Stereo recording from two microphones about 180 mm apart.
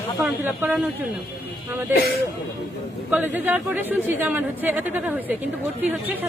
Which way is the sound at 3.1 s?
10° right (ahead or behind).